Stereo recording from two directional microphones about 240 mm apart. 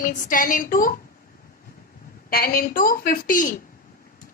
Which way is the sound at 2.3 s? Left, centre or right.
Left.